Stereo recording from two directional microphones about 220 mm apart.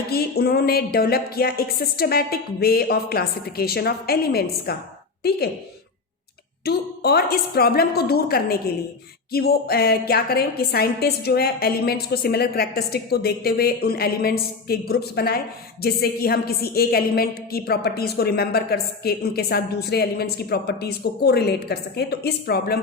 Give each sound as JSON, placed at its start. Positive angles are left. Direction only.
{"t": 0.1, "sound": "a woman's voice", "side_deg": 45}
{"t": 6.7, "sound": "a woman's voice", "side_deg": 45}